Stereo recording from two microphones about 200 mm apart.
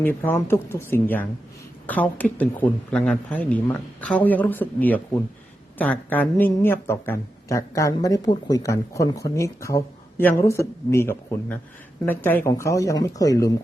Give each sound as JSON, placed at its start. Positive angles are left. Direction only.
{"t": 0.0, "sound": "speech", "side_deg": 10}